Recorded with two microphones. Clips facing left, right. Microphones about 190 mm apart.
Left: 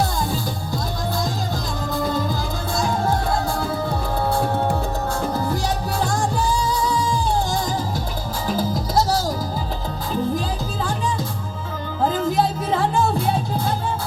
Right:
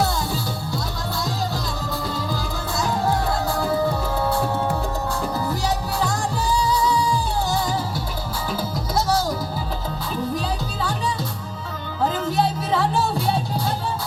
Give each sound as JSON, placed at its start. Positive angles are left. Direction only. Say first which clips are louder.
{"t": 1.9, "sound": "music", "louder": "left 6 dB", "side_deg": 50}
{"t": 8.4, "sound": "music", "louder": "left 5 dB", "side_deg": 40}
{"t": 10.8, "sound": "music", "louder": "left 2 dB", "side_deg": 45}
{"t": 12.7, "sound": "music", "louder": "left 2 dB", "side_deg": 50}